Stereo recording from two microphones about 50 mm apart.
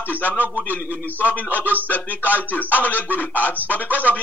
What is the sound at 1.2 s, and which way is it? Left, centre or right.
Speech, left.